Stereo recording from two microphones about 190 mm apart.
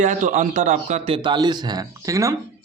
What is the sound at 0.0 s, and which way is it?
Speech, 40° right (ahead or behind).